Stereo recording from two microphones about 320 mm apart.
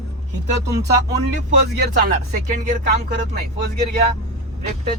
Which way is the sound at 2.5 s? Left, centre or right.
Right.